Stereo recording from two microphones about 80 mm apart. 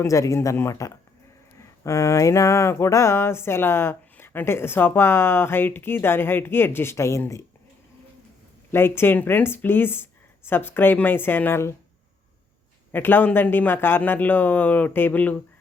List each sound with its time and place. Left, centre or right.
0.0 s a sound: left
8.7 s speech: left
12.9 s speech: left